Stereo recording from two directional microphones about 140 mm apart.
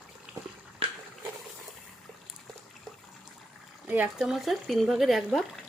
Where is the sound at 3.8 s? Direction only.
10° right (ahead or behind).